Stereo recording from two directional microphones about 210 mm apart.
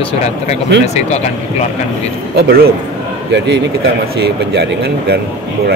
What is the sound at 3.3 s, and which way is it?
A man's voice, 55° right (ahead or behind).